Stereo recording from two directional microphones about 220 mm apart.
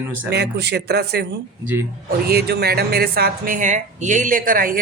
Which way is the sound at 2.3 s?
45° right (ahead or behind).